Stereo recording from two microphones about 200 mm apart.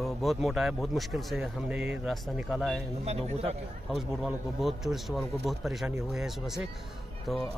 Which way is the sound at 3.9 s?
Centre (ahead or behind).